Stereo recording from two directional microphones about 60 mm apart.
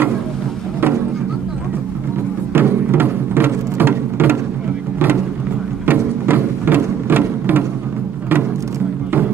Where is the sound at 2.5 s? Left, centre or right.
Right.